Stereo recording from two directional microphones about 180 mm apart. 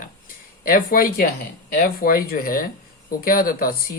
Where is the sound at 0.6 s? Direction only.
50° left (ahead or behind).